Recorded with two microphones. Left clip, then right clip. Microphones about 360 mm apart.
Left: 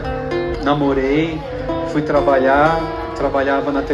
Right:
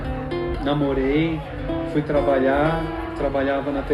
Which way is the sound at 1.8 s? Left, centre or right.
Centre.